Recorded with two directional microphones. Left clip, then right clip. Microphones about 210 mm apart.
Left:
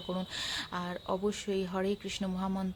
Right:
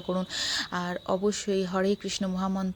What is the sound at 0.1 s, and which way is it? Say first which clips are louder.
Speech: right 7 dB; 20° right (ahead or behind).